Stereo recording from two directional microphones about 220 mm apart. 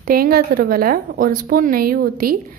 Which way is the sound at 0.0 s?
40° right (ahead or behind).